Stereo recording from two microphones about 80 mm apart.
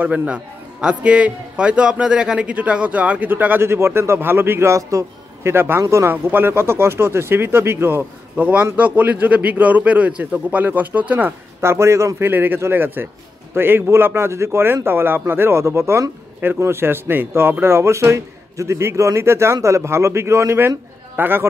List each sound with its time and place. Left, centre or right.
0.0 s a man's voice: centre
11.6 s speech: right
12.3 s a man's voice: right